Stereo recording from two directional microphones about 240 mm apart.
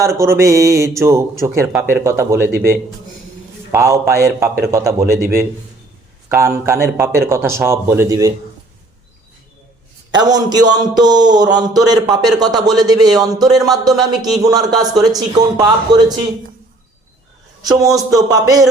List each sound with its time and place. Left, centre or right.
0.0 s speech: centre
3.7 s a man's voice: centre
10.1 s speech: centre
17.6 s a man's voice: centre